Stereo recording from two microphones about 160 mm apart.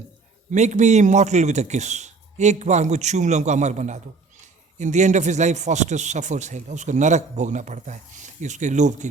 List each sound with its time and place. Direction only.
0.5 s speech: 45° right (ahead or behind)